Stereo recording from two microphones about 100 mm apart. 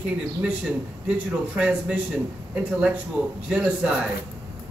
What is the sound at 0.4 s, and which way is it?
A man's voice, 10° right (ahead or behind).